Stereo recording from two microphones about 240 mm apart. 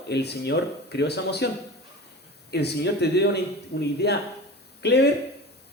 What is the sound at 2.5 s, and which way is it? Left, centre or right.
Speech, left.